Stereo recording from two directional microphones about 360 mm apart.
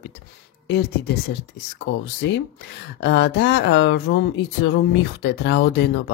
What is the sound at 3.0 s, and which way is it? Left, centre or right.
Speech, left.